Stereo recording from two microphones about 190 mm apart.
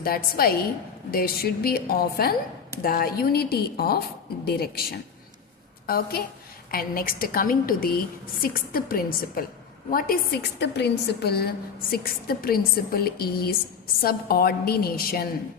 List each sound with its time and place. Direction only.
0.0 s a woman's voice: 50° left (ahead or behind)